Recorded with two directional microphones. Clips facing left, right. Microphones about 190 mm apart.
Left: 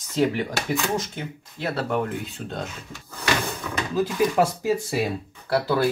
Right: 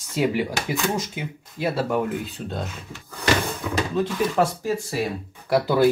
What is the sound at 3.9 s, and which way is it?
Speech, 10° left (ahead or behind).